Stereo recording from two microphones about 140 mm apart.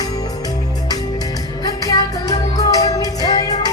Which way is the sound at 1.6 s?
25° left (ahead or behind).